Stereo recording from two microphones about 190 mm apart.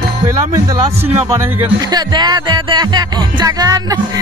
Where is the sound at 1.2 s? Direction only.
10° right (ahead or behind).